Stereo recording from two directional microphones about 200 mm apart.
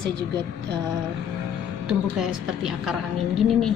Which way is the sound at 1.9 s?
5° right (ahead or behind).